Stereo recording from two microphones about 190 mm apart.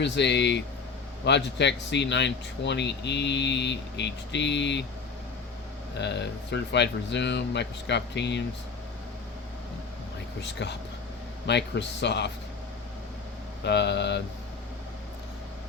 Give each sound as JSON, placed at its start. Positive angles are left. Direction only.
{"t": 0.0, "sound": "speech", "side_deg": 65}
{"t": 6.0, "sound": "speech", "side_deg": 65}
{"t": 10.4, "sound": "speech", "side_deg": 65}
{"t": 13.7, "sound": "speech", "side_deg": 65}